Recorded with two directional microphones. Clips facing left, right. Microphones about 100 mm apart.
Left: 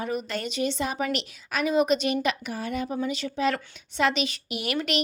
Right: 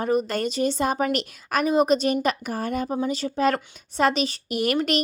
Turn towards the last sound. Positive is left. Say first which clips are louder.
# right 5 dB
turn(degrees=-40)  # may be behind; listen again after turning